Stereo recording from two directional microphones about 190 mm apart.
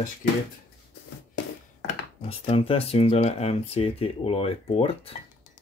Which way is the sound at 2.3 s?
30° left (ahead or behind).